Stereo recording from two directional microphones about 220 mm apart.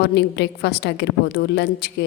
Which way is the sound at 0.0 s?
50° left (ahead or behind).